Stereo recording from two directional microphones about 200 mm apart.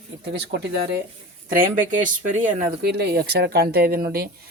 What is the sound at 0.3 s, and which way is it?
Speech, 60° right (ahead or behind).